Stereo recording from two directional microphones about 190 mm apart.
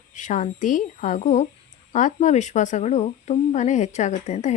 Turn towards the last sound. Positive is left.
turn(degrees=40)  # may be behind; listen again after turning